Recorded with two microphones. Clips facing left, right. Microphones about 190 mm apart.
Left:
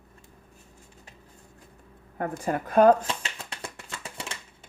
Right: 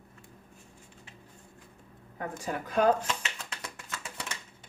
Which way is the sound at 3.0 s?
30° left (ahead or behind).